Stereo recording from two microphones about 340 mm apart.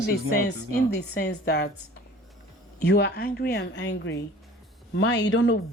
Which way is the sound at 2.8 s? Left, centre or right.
Left.